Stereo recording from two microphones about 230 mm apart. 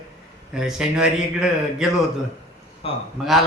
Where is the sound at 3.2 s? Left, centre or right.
Centre.